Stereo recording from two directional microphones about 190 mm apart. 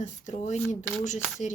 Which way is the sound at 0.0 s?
40° left (ahead or behind).